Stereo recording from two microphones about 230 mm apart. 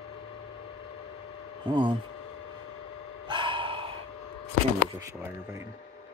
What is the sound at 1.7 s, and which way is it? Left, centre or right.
Speech, right.